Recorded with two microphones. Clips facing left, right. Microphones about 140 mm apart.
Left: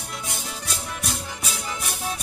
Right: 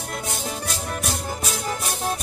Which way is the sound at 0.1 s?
50° right (ahead or behind).